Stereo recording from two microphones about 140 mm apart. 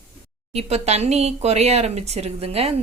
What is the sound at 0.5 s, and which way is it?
Speech, 50° right (ahead or behind).